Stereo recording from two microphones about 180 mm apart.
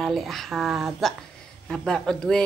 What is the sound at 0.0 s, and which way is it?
Speech, centre (ahead or behind).